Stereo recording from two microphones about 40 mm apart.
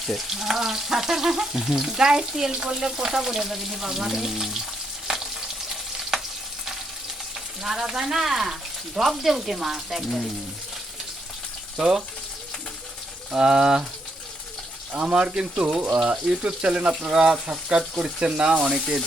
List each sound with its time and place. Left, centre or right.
0.0 s frying: centre
7.6 s frying: centre
11.8 s frying: centre
13.3 s frying: right
14.9 s frying: right
16.1 s frying: centre
16.4 s frying: right